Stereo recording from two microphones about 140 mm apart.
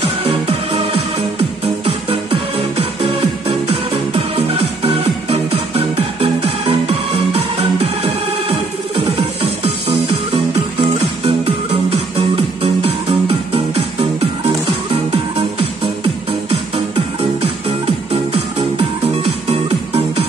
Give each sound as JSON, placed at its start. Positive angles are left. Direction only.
{"t": 0.2, "sound": "music", "side_deg": -45}
{"t": 3.9, "sound": "music", "side_deg": -45}
{"t": 9.8, "sound": "music", "side_deg": -40}
{"t": 16.0, "sound": "music", "side_deg": -40}